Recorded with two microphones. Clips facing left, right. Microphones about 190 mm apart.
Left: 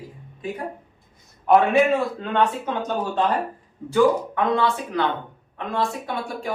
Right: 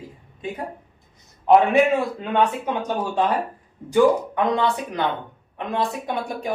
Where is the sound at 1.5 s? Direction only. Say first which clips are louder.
Right 1 dB; 20° right (ahead or behind).